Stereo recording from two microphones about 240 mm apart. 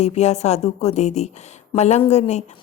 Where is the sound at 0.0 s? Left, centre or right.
Left.